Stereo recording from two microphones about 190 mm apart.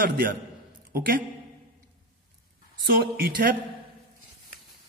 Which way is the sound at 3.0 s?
55° right (ahead or behind).